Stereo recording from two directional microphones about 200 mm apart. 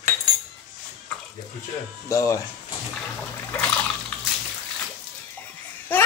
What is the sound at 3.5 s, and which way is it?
Water, 5° left (ahead or behind).